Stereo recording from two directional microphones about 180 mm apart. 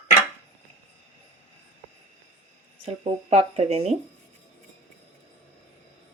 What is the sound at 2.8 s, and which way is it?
Speech, 35° right (ahead or behind).